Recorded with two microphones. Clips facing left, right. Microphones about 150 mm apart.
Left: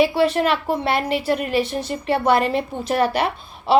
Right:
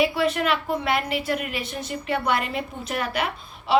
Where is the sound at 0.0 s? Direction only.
30° left (ahead or behind).